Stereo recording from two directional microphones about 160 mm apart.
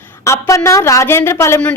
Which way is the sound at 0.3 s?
20° left (ahead or behind).